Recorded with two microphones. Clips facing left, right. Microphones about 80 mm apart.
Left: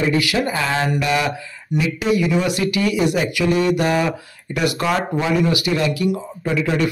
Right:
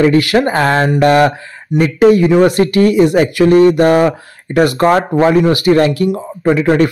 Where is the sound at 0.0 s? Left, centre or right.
Right.